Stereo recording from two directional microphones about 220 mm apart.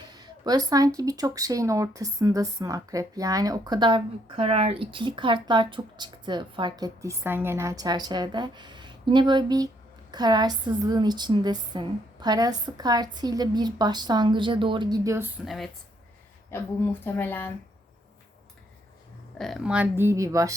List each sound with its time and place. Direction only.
0.0 s a sound: 20° right (ahead or behind)
0.9 s speech: 15° right (ahead or behind)
15.4 s speech: centre (ahead or behind)
16.5 s speech: 10° left (ahead or behind)
19.4 s speech: centre (ahead or behind); by 20.5 s 15° right (ahead or behind)